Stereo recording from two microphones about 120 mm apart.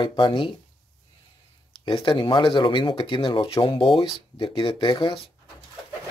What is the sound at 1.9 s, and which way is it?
Speech, 45° left (ahead or behind).